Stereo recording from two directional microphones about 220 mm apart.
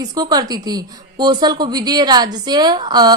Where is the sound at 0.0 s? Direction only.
15° right (ahead or behind).